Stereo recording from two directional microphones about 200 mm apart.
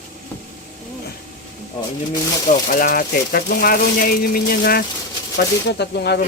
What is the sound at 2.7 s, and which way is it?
Speech, 45° left (ahead or behind).